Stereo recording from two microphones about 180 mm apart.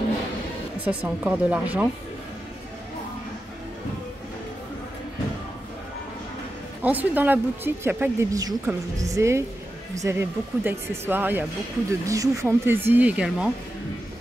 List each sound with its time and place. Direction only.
0.8 s speech: 10° right (ahead or behind)
6.8 s speech: 10° right (ahead or behind)